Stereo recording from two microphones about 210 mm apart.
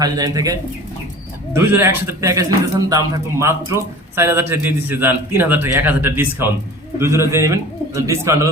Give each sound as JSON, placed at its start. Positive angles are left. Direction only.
{"t": 0.0, "sound": "a man's voice", "side_deg": -15}